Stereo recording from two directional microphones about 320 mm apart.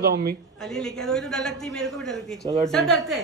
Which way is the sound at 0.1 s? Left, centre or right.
Right.